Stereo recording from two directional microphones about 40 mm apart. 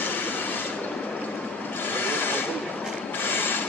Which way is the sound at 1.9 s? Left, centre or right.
Left.